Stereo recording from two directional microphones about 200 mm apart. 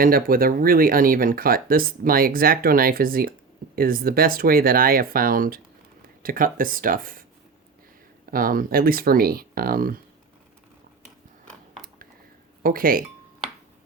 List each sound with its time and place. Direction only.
0.0 s speech: 45° right (ahead or behind)
8.3 s speech: 45° right (ahead or behind)
12.6 s speech: 45° right (ahead or behind)